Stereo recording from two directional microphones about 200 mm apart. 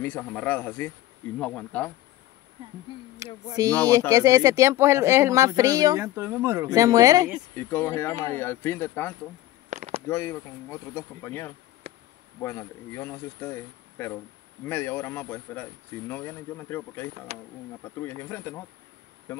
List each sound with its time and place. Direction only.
0.0 s speech: 5° left (ahead or behind)
2.9 s speech: 25° left (ahead or behind)
3.6 s speech: 15° right (ahead or behind)
7.5 s speech: 10° left (ahead or behind)
9.7 s a sound: 35° right (ahead or behind)
10.0 s speech: 15° left (ahead or behind)